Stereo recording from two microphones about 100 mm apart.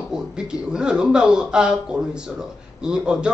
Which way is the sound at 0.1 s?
10° right (ahead or behind).